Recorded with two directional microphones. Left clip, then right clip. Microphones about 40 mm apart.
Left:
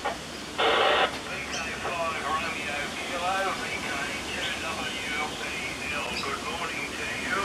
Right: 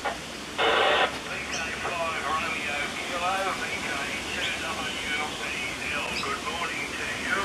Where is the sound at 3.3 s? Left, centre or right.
Right.